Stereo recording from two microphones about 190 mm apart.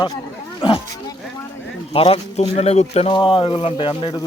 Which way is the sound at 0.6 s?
25° left (ahead or behind).